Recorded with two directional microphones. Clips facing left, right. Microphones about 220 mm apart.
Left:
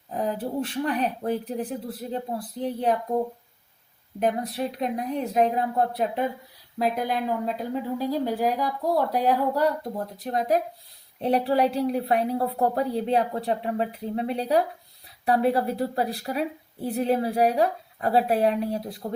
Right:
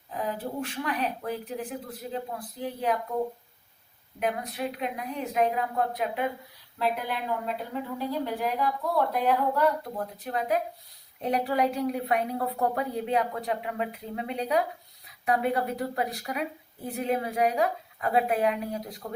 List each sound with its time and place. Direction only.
0.1 s a woman's voice: 35° left (ahead or behind)
4.2 s a woman's voice: 35° left (ahead or behind)